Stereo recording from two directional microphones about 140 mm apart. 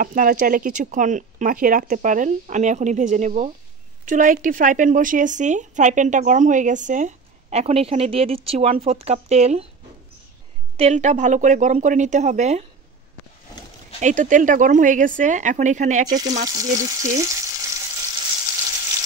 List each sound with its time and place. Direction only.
0.0 s a woman's voice: 70° right (ahead or behind); by 9.7 s 50° right (ahead or behind)
10.8 s a woman's voice: 55° right (ahead or behind)
14.0 s speech: 65° right (ahead or behind)
16.4 s frying: 25° right (ahead or behind)